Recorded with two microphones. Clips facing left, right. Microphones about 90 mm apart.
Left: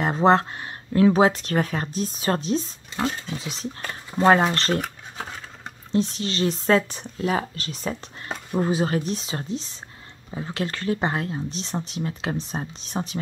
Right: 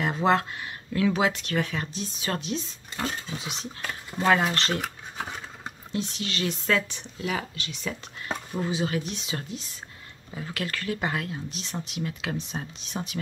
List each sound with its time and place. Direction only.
0.0 s speech: 35° left (ahead or behind)
4.8 s cutlery: centre (ahead or behind)
5.9 s speech: 35° left (ahead or behind)